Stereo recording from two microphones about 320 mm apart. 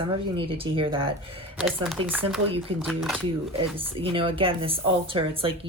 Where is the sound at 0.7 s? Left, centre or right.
Centre.